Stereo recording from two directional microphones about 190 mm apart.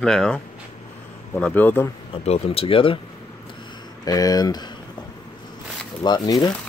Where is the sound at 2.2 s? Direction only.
35° left (ahead or behind).